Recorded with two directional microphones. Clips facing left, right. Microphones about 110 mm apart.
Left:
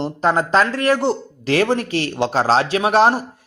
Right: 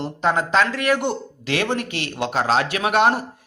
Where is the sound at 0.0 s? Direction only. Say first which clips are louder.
Left 3 dB; 40° left (ahead or behind).